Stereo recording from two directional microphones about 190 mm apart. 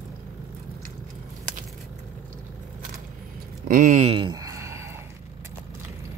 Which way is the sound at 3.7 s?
40° right (ahead or behind).